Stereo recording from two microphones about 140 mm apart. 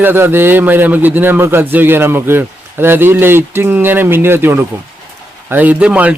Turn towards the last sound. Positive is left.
turn(degrees=-10)  # may be behind; listen again after turning